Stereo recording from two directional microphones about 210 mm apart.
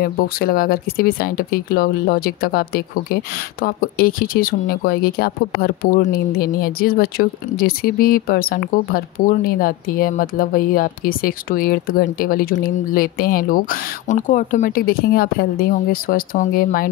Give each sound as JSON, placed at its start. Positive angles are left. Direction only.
{"t": 0.0, "sound": "speech", "side_deg": 45}